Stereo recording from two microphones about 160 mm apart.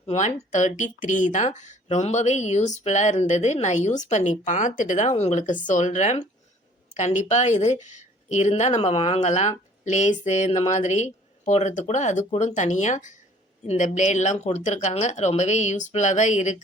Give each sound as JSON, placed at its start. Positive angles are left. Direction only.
{"t": 0.0, "sound": "speech", "side_deg": 40}